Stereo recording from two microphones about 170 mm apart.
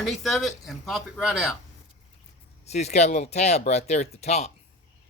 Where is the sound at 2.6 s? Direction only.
40° left (ahead or behind).